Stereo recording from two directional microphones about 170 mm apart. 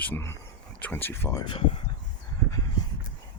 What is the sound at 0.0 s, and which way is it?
Speech, 15° left (ahead or behind).